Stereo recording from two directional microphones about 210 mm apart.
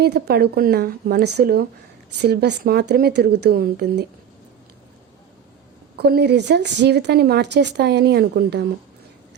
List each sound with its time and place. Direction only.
0.0 s speech: 50° right (ahead or behind)
6.0 s speech: 50° right (ahead or behind)